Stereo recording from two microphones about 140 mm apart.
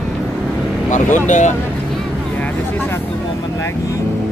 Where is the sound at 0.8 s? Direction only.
60° left (ahead or behind).